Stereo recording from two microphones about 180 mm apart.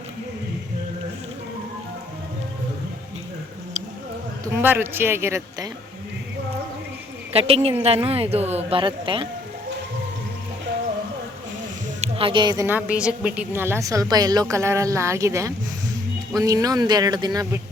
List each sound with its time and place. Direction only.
4.5 s a woman's voice: 10° right (ahead or behind)
7.3 s speech: 35° right (ahead or behind)
12.0 s speech: 30° right (ahead or behind)
12.6 s a woman's voice: 10° right (ahead or behind)